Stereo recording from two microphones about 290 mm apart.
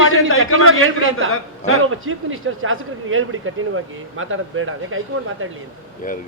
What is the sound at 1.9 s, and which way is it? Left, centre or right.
Speech, right.